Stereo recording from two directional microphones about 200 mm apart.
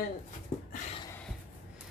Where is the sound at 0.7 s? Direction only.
35° left (ahead or behind).